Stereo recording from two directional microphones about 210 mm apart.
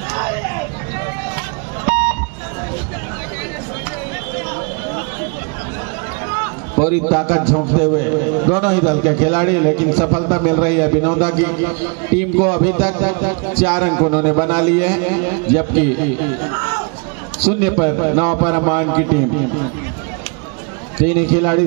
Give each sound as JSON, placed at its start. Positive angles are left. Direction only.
{"t": 1.9, "sound": "beep", "side_deg": -35}
{"t": 6.8, "sound": "a man's voice", "side_deg": -15}
{"t": 17.5, "sound": "a man's voice", "side_deg": -15}
{"t": 21.0, "sound": "a man's voice", "side_deg": -15}